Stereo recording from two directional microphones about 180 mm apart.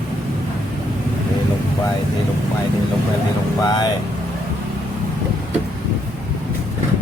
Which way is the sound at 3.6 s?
25° left (ahead or behind).